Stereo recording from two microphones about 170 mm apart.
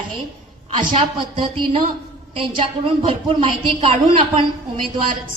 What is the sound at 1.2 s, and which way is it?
A woman's voice, 30° right (ahead or behind).